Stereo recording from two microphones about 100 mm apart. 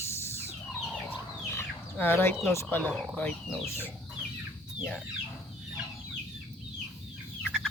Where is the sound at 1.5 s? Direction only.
25° left (ahead or behind).